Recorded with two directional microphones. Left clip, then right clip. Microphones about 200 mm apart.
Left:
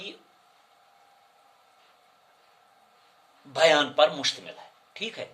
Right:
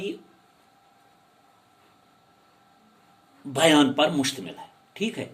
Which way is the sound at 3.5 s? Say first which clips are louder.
Right 1 dB; 15° left (ahead or behind).